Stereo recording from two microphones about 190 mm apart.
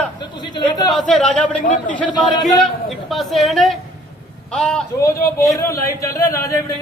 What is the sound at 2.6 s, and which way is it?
A man's voice, centre (ahead or behind).